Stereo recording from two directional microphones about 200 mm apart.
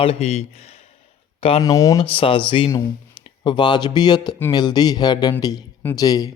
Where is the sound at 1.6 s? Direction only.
15° left (ahead or behind).